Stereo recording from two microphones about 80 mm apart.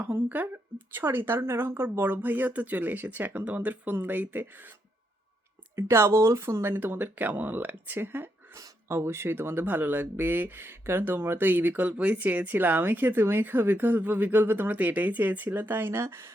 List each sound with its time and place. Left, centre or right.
0.0 s speech: right
5.7 s speech: right